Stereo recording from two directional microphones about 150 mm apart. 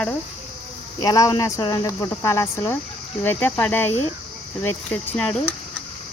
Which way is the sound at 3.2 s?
10° left (ahead or behind).